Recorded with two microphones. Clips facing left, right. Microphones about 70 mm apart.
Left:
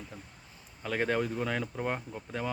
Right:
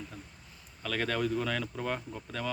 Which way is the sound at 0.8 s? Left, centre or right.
Left.